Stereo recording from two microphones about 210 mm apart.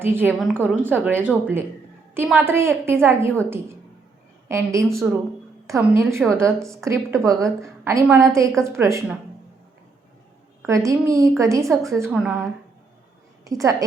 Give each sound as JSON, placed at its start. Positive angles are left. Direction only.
{"t": 0.0, "sound": "a woman's voice", "side_deg": -10}
{"t": 4.4, "sound": "a woman's voice", "side_deg": -15}
{"t": 10.7, "sound": "a woman's voice", "side_deg": -15}
{"t": 12.1, "sound": "a woman's voice", "side_deg": 0}
{"t": 13.4, "sound": "a woman's voice", "side_deg": -15}